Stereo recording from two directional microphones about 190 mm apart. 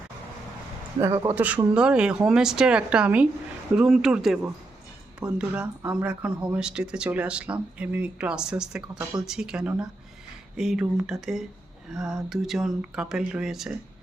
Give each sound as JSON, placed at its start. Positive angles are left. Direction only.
{"t": 0.9, "sound": "a man's voice", "side_deg": -15}
{"t": 1.5, "sound": "speech", "side_deg": -5}